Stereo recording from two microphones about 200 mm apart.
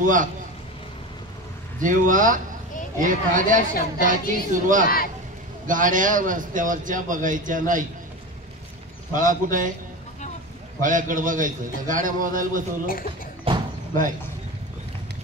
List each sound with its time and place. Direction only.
0.0 s a man's voice: 40° right (ahead or behind)
1.8 s a man's voice: 40° right (ahead or behind)
4.8 s a man's voice: 45° left (ahead or behind)
5.7 s a man's voice: 40° right (ahead or behind)
9.1 s a man's voice: 40° right (ahead or behind)
10.8 s a man's voice: 40° right (ahead or behind)
13.5 s slam: 25° right (ahead or behind)